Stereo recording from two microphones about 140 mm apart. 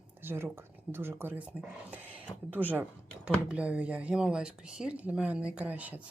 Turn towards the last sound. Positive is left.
turn(degrees=-10)  # may be behind; listen again after turning